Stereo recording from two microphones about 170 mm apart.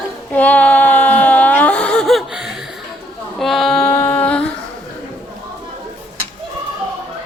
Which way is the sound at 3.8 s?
15° left (ahead or behind).